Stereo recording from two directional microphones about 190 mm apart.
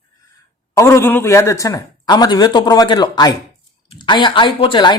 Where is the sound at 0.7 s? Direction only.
15° left (ahead or behind).